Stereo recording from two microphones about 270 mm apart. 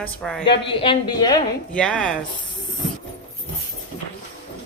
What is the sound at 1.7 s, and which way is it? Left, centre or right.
Speech, centre.